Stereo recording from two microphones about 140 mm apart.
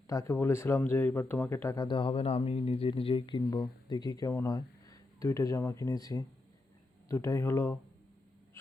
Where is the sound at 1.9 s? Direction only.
35° left (ahead or behind).